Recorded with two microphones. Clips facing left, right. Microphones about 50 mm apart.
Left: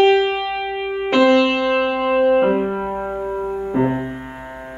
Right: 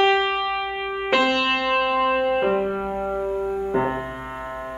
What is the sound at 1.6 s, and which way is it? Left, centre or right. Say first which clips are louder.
Music: left 3 dB; centre.